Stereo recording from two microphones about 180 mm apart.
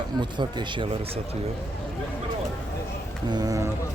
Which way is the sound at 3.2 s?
20° right (ahead or behind).